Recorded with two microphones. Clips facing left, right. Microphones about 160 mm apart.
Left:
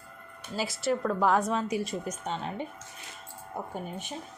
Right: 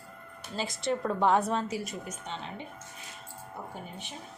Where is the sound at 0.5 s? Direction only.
5° left (ahead or behind).